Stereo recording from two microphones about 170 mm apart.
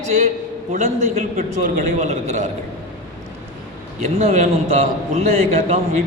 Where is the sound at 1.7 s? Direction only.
45° right (ahead or behind).